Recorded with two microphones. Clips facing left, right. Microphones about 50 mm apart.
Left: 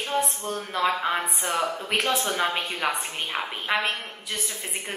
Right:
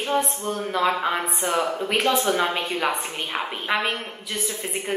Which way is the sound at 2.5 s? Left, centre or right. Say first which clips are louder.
Right 2 dB; centre.